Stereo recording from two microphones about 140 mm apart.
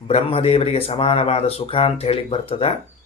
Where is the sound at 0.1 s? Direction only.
45° left (ahead or behind).